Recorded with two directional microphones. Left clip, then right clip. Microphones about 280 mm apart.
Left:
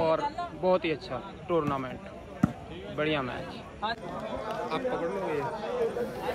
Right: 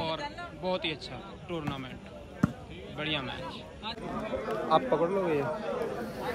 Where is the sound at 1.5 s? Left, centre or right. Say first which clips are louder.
Left 9 dB; centre.